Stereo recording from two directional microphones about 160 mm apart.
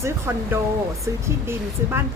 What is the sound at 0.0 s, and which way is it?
A woman's voice, 15° right (ahead or behind).